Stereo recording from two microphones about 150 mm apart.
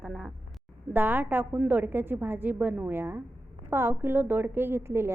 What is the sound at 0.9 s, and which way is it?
A woman's voice, 10° right (ahead or behind).